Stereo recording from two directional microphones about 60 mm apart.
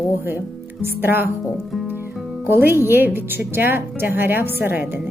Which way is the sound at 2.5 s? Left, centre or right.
Right.